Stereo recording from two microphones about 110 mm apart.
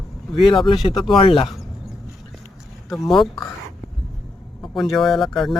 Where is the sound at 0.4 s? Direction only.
50° left (ahead or behind).